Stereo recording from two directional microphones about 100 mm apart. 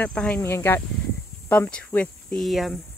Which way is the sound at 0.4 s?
25° left (ahead or behind).